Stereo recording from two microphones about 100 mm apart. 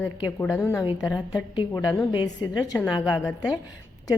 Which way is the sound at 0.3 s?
30° left (ahead or behind).